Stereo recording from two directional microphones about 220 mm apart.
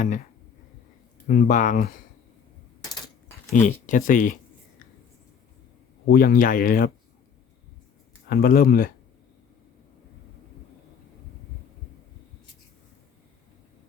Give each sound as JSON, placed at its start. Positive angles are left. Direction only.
{"t": 1.3, "sound": "speech", "side_deg": 35}
{"t": 2.9, "sound": "coin", "side_deg": 15}
{"t": 3.5, "sound": "speech", "side_deg": 35}
{"t": 6.1, "sound": "speech", "side_deg": 40}
{"t": 8.3, "sound": "speech", "side_deg": 45}